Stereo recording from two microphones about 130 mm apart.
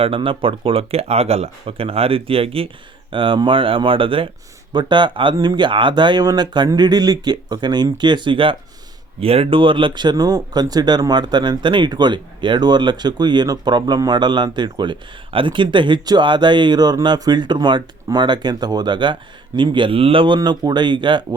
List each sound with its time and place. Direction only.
0.0 s speech: 45° right (ahead or behind)